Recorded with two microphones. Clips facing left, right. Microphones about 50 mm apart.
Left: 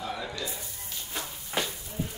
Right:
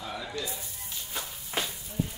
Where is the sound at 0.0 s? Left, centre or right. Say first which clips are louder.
Left 3 dB; centre.